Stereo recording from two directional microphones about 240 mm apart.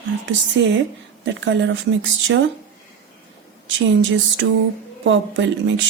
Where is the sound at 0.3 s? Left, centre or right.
Right.